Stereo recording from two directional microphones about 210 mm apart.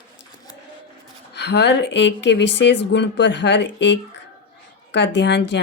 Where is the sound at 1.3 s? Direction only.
55° left (ahead or behind).